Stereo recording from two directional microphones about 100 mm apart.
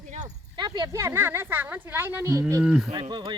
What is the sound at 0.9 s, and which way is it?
Speech, 25° right (ahead or behind).